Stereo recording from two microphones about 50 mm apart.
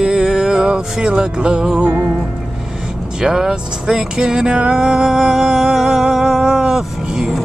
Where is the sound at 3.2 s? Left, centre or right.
Centre.